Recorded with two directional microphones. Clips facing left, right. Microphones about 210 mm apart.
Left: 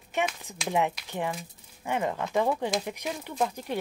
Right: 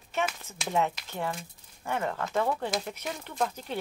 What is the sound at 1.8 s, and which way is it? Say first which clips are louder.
A woman's voice: left 2 dB; 15° left (ahead or behind).